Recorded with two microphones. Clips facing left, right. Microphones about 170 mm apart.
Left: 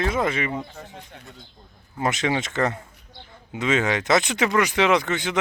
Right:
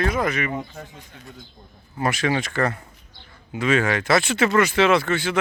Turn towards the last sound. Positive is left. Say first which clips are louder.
# right 2 dB
turn(degrees=20)  # may be behind; listen again after turning